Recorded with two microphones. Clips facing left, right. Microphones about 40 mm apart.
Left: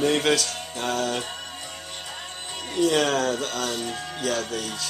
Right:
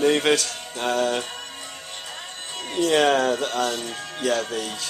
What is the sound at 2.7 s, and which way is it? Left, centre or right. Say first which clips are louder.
Speech: right 3 dB; centre.